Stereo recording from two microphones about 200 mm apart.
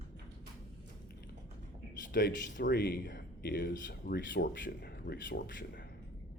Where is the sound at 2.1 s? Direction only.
45° left (ahead or behind).